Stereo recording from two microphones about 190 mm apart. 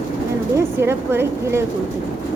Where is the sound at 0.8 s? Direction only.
10° right (ahead or behind).